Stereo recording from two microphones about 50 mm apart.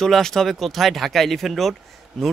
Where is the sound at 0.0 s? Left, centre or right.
Centre.